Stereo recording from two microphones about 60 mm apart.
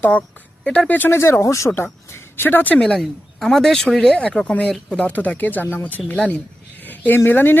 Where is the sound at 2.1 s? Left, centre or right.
Left.